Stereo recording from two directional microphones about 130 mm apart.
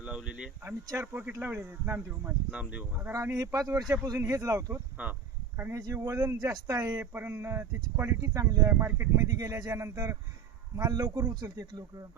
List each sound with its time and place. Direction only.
0.0 s speech: 5° right (ahead or behind); by 4.8 s 25° right (ahead or behind)
5.0 s speech: 10° right (ahead or behind); by 12.0 s 30° right (ahead or behind)